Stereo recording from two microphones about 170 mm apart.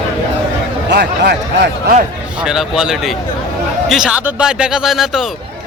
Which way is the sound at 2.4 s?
5° right (ahead or behind).